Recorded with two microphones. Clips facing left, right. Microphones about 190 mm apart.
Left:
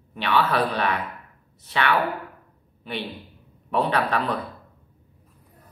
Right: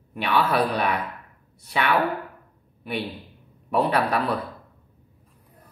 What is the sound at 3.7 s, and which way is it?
Speech, 10° right (ahead or behind).